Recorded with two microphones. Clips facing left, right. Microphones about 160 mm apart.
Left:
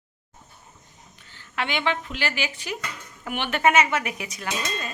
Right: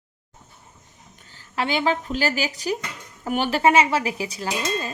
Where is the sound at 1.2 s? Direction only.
35° right (ahead or behind).